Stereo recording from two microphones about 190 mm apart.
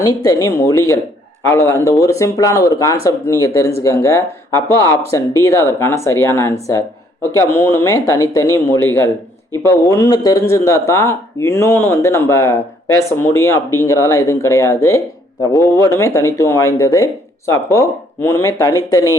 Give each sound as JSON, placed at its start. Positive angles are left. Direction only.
{"t": 0.3, "sound": "speech", "side_deg": 15}